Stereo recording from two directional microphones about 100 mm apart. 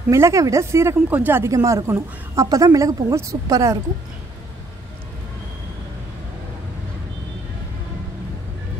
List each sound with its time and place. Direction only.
0.1 s speech: 30° right (ahead or behind)
1.1 s speech: 15° right (ahead or behind)
1.4 s a woman's voice: 30° right (ahead or behind)